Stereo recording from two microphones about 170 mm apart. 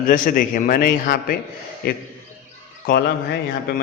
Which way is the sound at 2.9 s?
60° left (ahead or behind).